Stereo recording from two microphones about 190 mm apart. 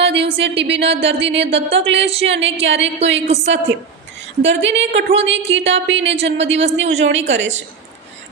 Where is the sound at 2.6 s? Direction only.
75° right (ahead or behind).